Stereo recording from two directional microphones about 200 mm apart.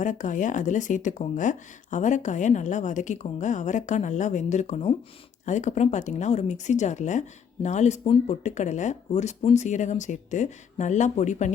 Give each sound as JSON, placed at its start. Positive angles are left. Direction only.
{"t": 0.0, "sound": "speech", "side_deg": 40}